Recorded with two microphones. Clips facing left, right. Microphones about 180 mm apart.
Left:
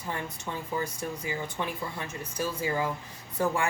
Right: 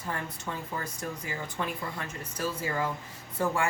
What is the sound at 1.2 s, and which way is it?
Speech, 20° left (ahead or behind).